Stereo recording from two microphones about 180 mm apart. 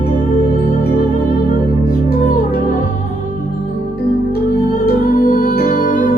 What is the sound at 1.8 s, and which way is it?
Music, 50° left (ahead or behind).